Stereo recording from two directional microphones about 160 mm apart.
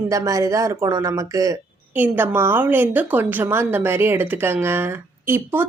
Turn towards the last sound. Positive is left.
turn(degrees=-15)  # may be behind; listen again after turning